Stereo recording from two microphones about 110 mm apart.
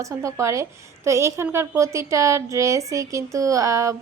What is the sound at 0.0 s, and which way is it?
Speech, 30° right (ahead or behind).